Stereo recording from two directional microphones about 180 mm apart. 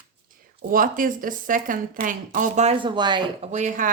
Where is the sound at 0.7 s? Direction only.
50° right (ahead or behind); by 3.2 s 25° right (ahead or behind).